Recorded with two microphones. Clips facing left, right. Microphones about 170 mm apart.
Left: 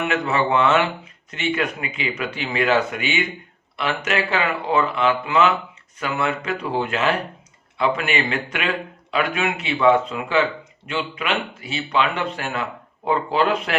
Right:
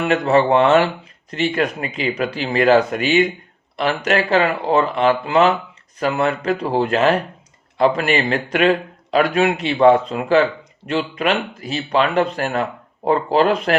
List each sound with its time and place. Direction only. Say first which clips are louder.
0.0 s a man's voice: right 6 dB; 35° right (ahead or behind)